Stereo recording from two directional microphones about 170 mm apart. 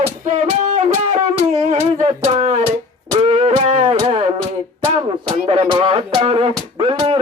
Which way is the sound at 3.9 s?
20° right (ahead or behind).